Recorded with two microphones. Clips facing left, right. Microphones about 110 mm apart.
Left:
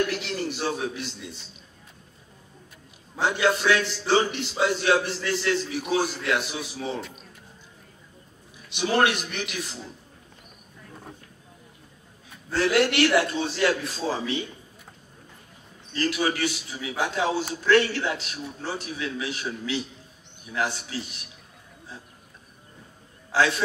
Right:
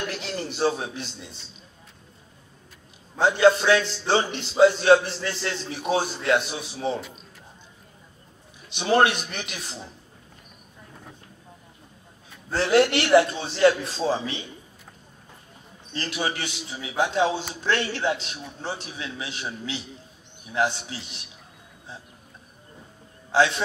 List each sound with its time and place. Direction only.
0.2 s a man's voice: 35° right (ahead or behind)
3.2 s a man's voice: 30° right (ahead or behind)
8.6 s a man's voice: 30° right (ahead or behind)
12.5 s a man's voice: 30° right (ahead or behind)
15.9 s a man's voice: 25° right (ahead or behind)
23.3 s a man's voice: 25° right (ahead or behind)